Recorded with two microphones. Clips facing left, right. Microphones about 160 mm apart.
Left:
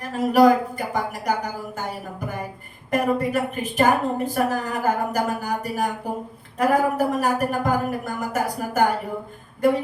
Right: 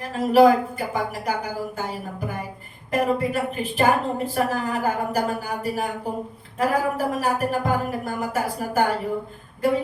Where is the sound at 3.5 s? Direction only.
45° left (ahead or behind).